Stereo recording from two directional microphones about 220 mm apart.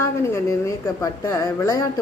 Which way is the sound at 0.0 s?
15° left (ahead or behind).